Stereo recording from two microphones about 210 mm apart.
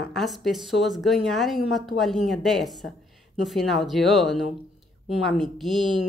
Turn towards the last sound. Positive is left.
turn(degrees=0)  # may be behind; listen again after turning